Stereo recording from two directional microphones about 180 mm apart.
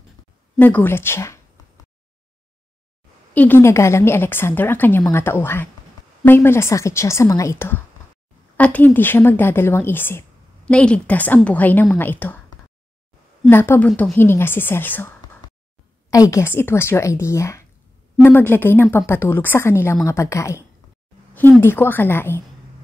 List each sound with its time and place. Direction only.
0.6 s a woman's voice: 10° left (ahead or behind)
3.3 s a woman's voice: 10° left (ahead or behind)
13.5 s a woman's voice: 10° left (ahead or behind)